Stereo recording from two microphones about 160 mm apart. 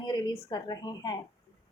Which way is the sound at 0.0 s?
25° left (ahead or behind).